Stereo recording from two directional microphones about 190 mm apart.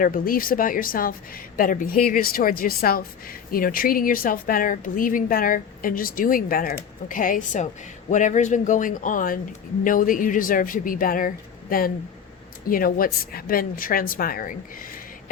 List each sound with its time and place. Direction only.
0.0 s a woman's voice: 45° left (ahead or behind)